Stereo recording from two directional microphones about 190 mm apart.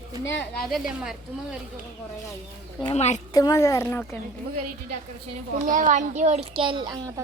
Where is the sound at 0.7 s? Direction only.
5° right (ahead or behind).